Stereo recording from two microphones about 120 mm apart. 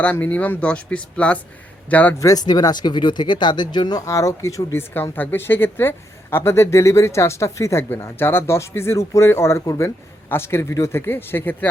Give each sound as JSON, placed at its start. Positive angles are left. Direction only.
{"t": 0.0, "sound": "speech", "side_deg": 10}
{"t": 2.1, "sound": "speech", "side_deg": 30}
{"t": 4.0, "sound": "speech", "side_deg": 25}